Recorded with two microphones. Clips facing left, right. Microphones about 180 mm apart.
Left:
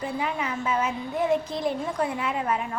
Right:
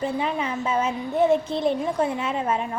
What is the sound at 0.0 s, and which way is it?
A woman's voice, 25° right (ahead or behind).